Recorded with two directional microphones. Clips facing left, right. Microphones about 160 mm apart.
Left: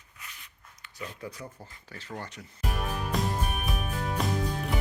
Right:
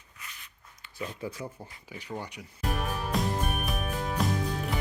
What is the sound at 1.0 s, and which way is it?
Speech, 30° right (ahead or behind).